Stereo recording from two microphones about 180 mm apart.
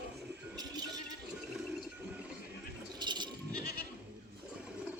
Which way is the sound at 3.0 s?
25° right (ahead or behind).